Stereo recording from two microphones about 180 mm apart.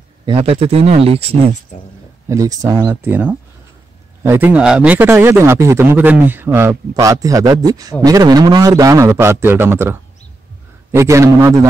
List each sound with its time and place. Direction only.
0.2 s speech: 30° right (ahead or behind)
2.2 s a man's voice: 20° right (ahead or behind)